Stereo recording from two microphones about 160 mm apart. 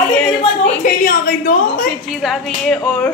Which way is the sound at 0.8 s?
55° left (ahead or behind).